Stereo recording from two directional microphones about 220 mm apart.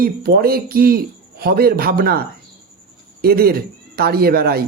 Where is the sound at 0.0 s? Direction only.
45° right (ahead or behind).